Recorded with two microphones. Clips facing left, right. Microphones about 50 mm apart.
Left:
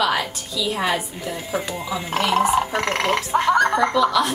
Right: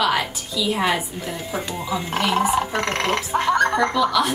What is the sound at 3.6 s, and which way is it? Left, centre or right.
Snicker, centre.